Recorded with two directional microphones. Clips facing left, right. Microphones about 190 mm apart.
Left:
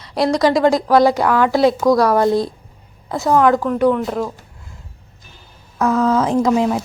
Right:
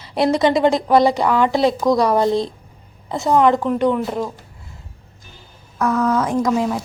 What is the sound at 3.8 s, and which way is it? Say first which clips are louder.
Speech: left 2 dB; centre (ahead or behind).